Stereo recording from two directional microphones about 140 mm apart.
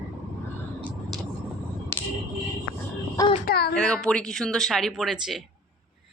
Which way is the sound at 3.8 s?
5° left (ahead or behind).